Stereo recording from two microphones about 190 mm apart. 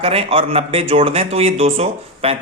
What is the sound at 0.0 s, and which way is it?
A man's voice, 30° right (ahead or behind).